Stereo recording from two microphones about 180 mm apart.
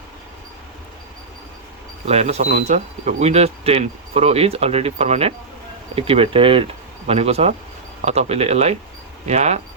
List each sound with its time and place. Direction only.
2.0 s speech: 35° right (ahead or behind)